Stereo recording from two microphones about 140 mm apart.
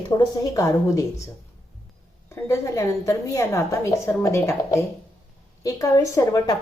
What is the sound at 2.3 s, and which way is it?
A woman's voice, 20° left (ahead or behind).